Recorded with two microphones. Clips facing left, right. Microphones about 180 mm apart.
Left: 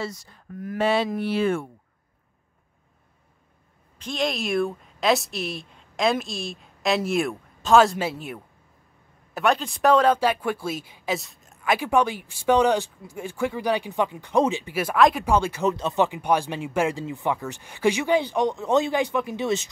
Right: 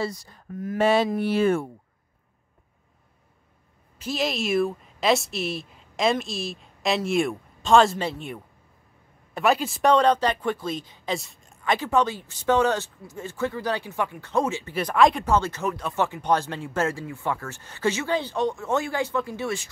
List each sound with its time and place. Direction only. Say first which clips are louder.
0.0 s speech: right 3 dB; 35° right (ahead or behind)
0.7 s speech: right 2 dB; 45° right (ahead or behind)
4.0 s speech: even; 5° right (ahead or behind); by 19.7 s 20° left (ahead or behind)